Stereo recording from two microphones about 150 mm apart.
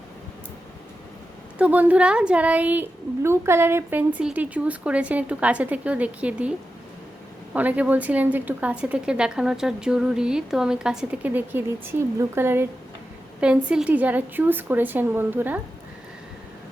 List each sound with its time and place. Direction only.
1.5 s a woman's voice: 10° right (ahead or behind)
7.5 s a woman's voice: 10° right (ahead or behind)